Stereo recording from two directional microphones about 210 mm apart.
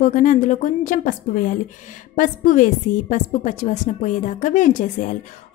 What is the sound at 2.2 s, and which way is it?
A woman's voice, 40° left (ahead or behind).